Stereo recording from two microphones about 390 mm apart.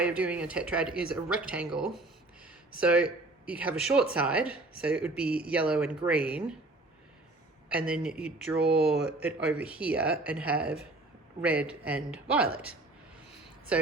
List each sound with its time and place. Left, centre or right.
0.0 s speech: centre
7.7 s speech: centre
8.5 s speech: right
9.2 s speech: centre